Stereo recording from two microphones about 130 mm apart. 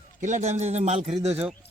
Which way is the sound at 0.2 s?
70° right (ahead or behind).